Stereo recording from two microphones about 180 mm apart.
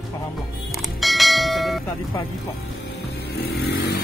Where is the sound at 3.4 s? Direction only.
65° left (ahead or behind).